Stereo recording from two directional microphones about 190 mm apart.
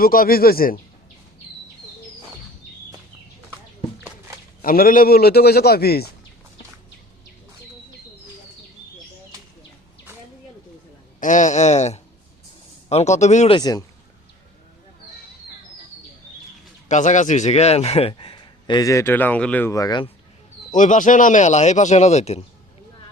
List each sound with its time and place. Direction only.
0.0 s speech: 50° left (ahead or behind)
4.6 s a man's voice: 50° left (ahead or behind)
11.2 s speech: 40° left (ahead or behind)
13.6 s a man's voice: 20° left (ahead or behind)
16.9 s a man's voice: 40° left (ahead or behind); by 20.1 s 20° left (ahead or behind)
20.7 s speech: 40° left (ahead or behind)